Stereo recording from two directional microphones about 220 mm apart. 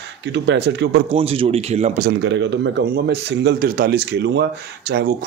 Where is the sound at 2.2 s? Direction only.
55° right (ahead or behind).